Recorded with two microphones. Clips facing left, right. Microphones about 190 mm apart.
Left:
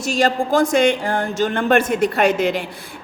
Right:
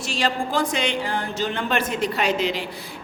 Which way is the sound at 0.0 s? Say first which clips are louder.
Left 6 dB; 45° left (ahead or behind).